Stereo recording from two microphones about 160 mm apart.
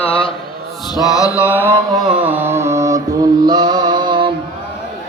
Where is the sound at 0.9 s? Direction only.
20° left (ahead or behind).